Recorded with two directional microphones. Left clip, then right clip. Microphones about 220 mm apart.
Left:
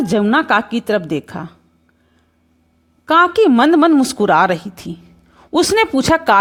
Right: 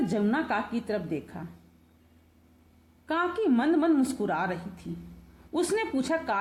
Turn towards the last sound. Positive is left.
turn(degrees=45)  # may be behind; listen again after turning